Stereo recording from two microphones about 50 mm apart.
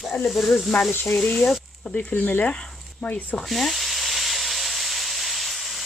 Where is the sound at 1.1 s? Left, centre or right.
Centre.